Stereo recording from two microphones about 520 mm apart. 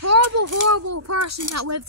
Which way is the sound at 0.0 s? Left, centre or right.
Right.